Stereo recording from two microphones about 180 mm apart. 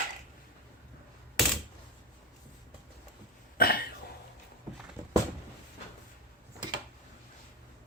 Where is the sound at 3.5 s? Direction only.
55° left (ahead or behind).